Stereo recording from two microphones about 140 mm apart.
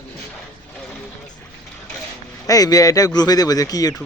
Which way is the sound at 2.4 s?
25° left (ahead or behind).